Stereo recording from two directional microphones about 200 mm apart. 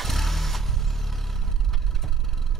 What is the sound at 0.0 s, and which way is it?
Vehicle, centre (ahead or behind).